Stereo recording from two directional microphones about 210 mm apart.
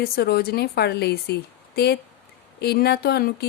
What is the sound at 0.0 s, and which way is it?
A woman's voice, 50° left (ahead or behind).